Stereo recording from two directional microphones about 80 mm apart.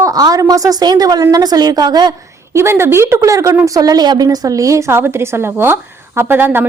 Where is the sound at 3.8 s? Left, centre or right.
Right.